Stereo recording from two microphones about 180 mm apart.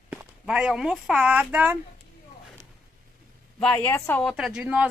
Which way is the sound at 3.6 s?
10° left (ahead or behind).